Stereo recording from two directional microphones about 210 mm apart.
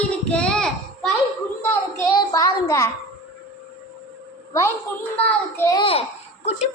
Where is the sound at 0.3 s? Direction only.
5° left (ahead or behind).